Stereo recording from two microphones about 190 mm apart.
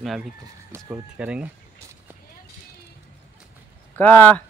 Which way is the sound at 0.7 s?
15° right (ahead or behind).